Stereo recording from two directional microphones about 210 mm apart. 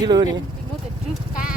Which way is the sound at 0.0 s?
20° right (ahead or behind).